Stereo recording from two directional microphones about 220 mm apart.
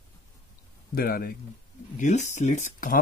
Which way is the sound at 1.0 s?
45° left (ahead or behind).